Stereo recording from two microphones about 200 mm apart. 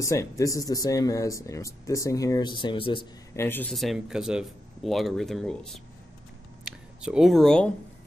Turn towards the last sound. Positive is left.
turn(degrees=5)  # may be behind; listen again after turning